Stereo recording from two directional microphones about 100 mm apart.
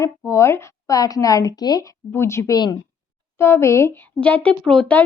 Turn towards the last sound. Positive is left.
turn(degrees=10)  # may be behind; listen again after turning